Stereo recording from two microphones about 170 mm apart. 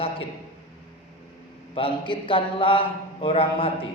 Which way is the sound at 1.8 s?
30° left (ahead or behind).